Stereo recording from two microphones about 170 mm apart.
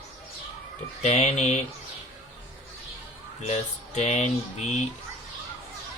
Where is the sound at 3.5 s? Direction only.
40° left (ahead or behind).